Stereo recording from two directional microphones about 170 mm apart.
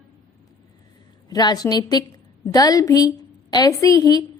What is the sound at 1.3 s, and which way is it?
A woman's voice, 25° left (ahead or behind).